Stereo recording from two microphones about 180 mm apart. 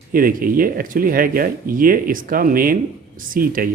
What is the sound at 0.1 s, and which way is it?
Speech, 50° right (ahead or behind).